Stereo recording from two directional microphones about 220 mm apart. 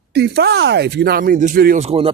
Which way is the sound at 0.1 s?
50° right (ahead or behind).